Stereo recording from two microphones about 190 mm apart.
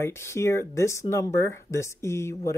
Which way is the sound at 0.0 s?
15° left (ahead or behind).